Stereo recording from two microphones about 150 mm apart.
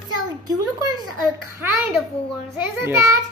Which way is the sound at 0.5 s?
25° right (ahead or behind).